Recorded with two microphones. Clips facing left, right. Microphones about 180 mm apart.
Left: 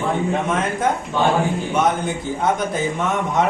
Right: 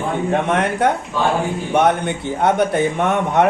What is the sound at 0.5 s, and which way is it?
A woman's voice, 70° right (ahead or behind).